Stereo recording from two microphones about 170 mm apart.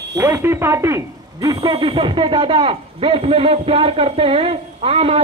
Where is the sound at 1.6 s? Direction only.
30° right (ahead or behind).